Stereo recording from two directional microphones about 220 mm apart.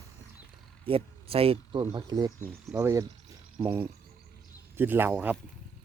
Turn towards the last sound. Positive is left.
turn(degrees=-5)  # may be behind; listen again after turning